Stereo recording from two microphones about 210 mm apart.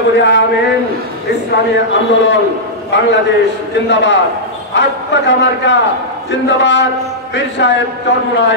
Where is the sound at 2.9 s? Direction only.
60° left (ahead or behind).